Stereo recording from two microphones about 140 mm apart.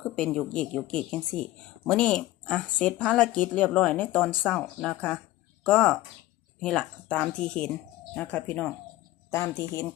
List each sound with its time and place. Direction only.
0.0 s speech: 5° left (ahead or behind)